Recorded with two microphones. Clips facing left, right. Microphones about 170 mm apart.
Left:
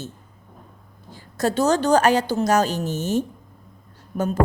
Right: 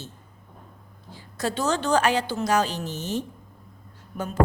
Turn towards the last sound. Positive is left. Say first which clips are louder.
# left 8 dB
turn(degrees=45)  # may be behind; listen again after turning